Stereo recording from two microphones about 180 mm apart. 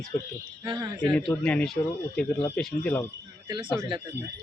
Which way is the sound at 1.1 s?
5° left (ahead or behind).